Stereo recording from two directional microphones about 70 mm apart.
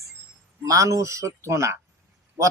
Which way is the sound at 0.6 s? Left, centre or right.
Right.